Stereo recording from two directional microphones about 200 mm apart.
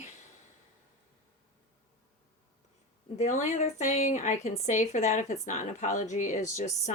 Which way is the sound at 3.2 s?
35° left (ahead or behind).